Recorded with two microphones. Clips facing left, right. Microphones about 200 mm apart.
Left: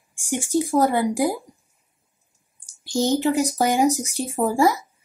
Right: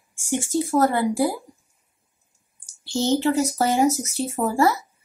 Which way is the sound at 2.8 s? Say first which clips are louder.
Even; 15° left (ahead or behind).